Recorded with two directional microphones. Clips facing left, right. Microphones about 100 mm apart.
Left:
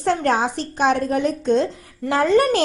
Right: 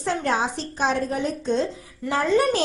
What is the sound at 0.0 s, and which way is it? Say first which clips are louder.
A woman's voice: left 4 dB; 60° left (ahead or behind).